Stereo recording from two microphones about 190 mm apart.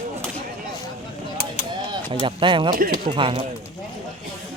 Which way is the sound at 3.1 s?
30° right (ahead or behind).